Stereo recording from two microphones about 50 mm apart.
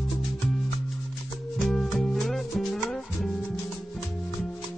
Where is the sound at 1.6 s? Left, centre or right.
Centre.